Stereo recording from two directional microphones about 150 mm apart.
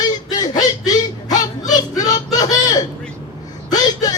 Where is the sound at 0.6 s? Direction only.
25° left (ahead or behind).